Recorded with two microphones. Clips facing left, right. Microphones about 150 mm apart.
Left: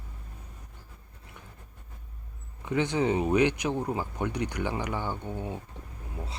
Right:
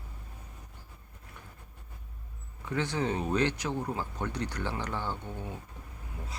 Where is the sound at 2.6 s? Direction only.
20° left (ahead or behind).